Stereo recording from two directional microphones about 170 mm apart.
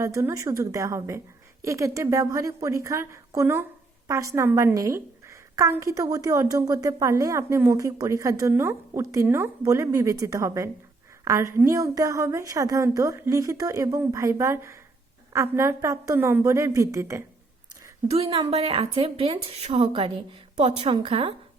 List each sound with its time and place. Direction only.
0.0 s a woman's voice: 20° right (ahead or behind)
18.1 s speech: 35° right (ahead or behind)